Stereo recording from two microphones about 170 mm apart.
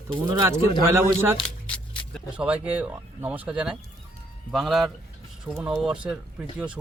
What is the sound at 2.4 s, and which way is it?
Speech, 10° right (ahead or behind).